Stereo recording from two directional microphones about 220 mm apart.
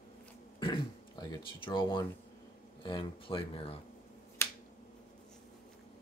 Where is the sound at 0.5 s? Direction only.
20° left (ahead or behind).